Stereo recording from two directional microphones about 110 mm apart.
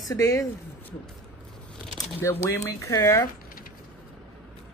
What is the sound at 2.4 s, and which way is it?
Speech, 30° left (ahead or behind).